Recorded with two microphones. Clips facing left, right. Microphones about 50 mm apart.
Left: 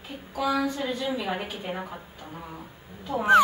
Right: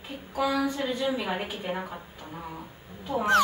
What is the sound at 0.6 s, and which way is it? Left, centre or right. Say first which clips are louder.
A woman's voice: right 1 dB; centre.